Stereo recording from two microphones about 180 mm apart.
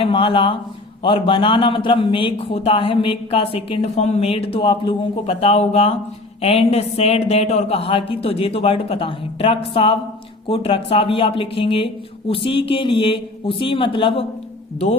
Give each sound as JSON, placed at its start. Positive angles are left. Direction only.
{"t": 0.0, "sound": "a man's voice", "side_deg": 30}